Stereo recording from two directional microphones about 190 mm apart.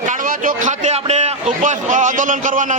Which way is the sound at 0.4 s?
40° right (ahead or behind).